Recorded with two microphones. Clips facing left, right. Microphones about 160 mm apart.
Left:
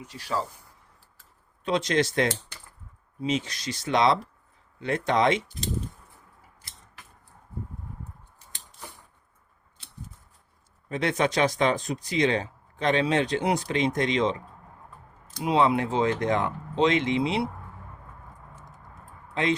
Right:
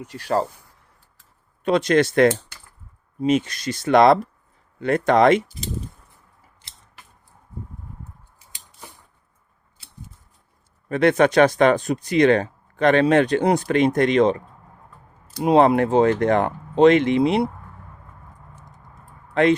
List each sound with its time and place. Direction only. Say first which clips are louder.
0.0 s speech: right 8 dB; 55° right (ahead or behind)
1.6 s speech: right 7 dB; 55° right (ahead or behind)
10.8 s speech: right 9 dB; 60° right (ahead or behind)
15.4 s speech: right 7 dB; 55° right (ahead or behind)
19.3 s speech: right 9 dB; 60° right (ahead or behind)